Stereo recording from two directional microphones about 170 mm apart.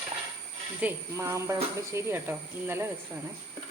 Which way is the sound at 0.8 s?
15° right (ahead or behind).